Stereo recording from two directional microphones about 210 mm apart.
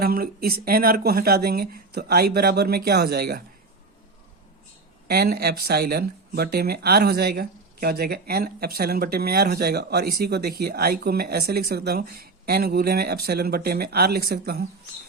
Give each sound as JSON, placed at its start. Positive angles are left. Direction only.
{"t": 0.0, "sound": "speech", "side_deg": -45}
{"t": 5.0, "sound": "speech", "side_deg": -50}